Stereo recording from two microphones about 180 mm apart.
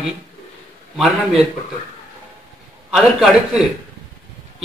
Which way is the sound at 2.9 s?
5° right (ahead or behind).